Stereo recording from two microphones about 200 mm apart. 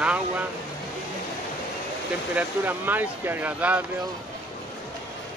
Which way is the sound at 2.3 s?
10° right (ahead or behind).